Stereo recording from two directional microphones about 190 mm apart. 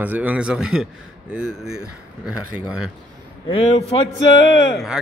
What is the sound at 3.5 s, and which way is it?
A man's voice, 30° left (ahead or behind).